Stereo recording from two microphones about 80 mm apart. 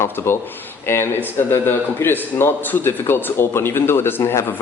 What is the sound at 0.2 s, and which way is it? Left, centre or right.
Speech, left.